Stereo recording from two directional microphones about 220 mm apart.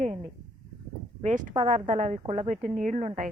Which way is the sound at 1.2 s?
35° right (ahead or behind).